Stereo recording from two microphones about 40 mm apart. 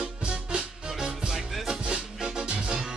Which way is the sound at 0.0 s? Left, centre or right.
Right.